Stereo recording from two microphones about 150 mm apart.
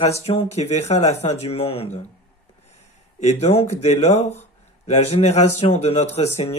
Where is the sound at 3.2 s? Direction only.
45° left (ahead or behind).